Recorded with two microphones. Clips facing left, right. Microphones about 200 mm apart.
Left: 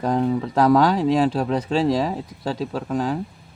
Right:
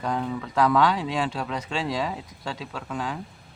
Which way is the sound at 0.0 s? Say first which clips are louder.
Left 7 dB; 40° left (ahead or behind).